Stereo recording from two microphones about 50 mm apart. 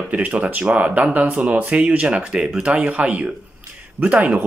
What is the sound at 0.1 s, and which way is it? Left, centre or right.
Speech, right.